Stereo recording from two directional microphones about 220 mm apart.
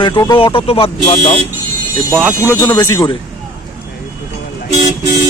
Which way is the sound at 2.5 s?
15° left (ahead or behind).